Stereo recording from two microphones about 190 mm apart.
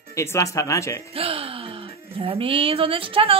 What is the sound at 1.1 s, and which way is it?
Speech, 30° right (ahead or behind).